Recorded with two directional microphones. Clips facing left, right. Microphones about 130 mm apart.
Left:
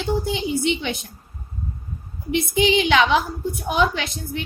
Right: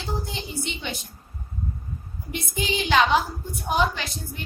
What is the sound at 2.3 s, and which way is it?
A woman's voice, 75° left (ahead or behind).